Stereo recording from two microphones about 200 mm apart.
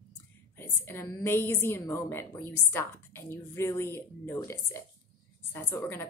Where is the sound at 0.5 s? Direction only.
10° left (ahead or behind).